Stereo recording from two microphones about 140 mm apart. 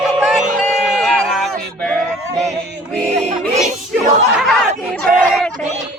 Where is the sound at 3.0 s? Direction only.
55° right (ahead or behind).